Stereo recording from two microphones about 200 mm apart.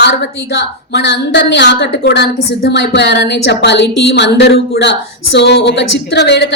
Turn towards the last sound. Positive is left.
turn(degrees=60)  # may be behind; listen again after turning